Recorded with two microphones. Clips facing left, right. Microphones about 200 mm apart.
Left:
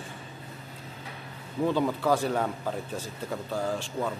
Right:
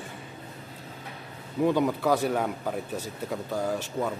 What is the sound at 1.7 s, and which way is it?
A man's voice, 15° right (ahead or behind).